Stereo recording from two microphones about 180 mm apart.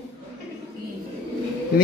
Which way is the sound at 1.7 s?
55° left (ahead or behind).